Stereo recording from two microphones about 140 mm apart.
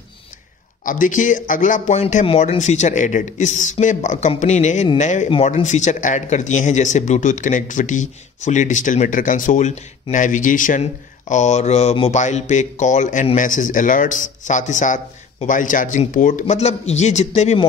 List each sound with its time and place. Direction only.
0.8 s speech: 70° left (ahead or behind)
10.8 s speech: 55° left (ahead or behind)